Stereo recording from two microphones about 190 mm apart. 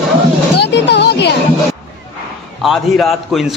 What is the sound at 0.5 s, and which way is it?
Music, 65° left (ahead or behind).